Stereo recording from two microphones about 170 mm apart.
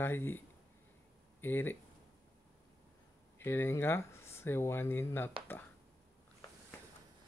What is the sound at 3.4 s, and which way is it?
Speech, 15° left (ahead or behind).